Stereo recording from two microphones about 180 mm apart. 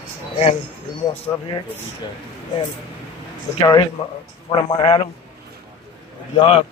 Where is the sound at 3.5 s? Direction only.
20° left (ahead or behind).